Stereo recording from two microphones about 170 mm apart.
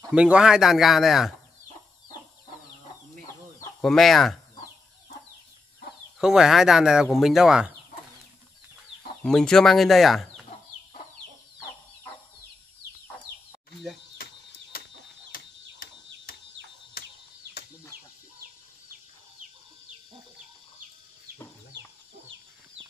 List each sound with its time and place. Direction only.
0.1 s speech: 5° right (ahead or behind)
3.8 s speech: centre (ahead or behind)
6.1 s speech: 5° right (ahead or behind)
9.2 s speech: 5° left (ahead or behind)
14.1 s a sound: 60° left (ahead or behind)
17.9 s chicken: 60° right (ahead or behind)